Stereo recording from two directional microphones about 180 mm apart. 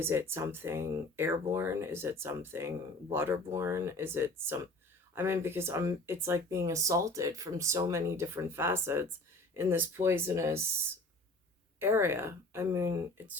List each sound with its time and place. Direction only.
0.0 s speech: 15° right (ahead or behind)
11.8 s speech: 15° right (ahead or behind)